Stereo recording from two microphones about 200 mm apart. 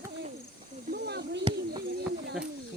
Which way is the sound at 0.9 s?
50° right (ahead or behind).